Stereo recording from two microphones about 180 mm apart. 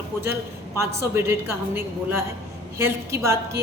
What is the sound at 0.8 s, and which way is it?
Speech, 15° right (ahead or behind).